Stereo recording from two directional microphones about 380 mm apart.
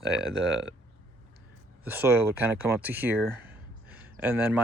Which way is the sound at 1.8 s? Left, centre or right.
Centre.